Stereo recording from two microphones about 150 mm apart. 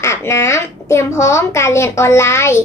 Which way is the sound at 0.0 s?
20° left (ahead or behind).